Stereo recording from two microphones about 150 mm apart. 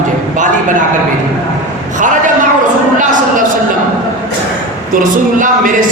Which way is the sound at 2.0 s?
60° right (ahead or behind).